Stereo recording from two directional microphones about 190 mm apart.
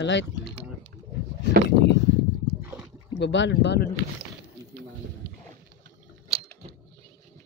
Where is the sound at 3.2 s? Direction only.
70° left (ahead or behind).